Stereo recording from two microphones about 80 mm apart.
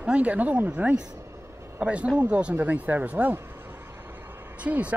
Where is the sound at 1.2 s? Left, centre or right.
Right.